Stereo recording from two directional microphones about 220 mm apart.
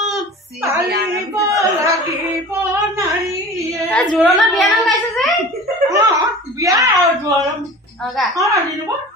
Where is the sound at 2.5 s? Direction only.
15° right (ahead or behind).